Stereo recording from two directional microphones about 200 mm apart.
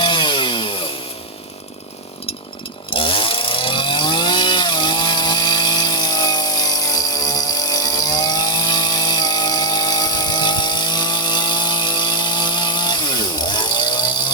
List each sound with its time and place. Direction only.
0.0 s chainsaw: 25° left (ahead or behind)
2.9 s chainsaw: 25° left (ahead or behind)